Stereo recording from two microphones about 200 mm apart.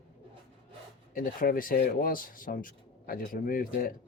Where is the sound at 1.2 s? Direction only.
45° left (ahead or behind).